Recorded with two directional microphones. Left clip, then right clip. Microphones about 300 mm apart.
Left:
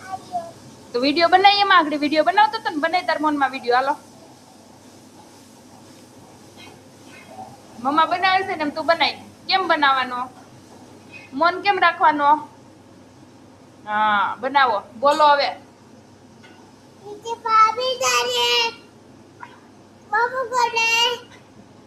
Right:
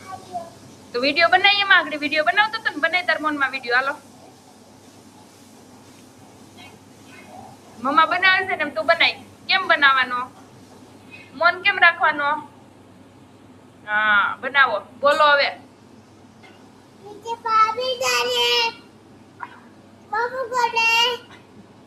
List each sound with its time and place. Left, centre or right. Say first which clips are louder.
0.9 s a woman's voice: left 1 dB; centre
7.8 s a woman's voice: right 1 dB; centre
12.0 s a woman's voice: left 4 dB; left
13.8 s a woman's voice: right 1 dB; centre
17.2 s child singing: left 2 dB; centre
19.4 s cat: right 4 dB; centre
20.1 s child singing: left 3 dB; centre